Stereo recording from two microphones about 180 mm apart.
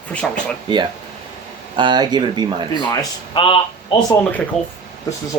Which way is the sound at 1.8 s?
25° right (ahead or behind).